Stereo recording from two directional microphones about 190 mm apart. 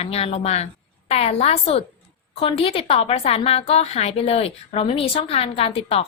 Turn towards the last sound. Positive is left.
turn(degrees=30)  # may be behind; listen again after turning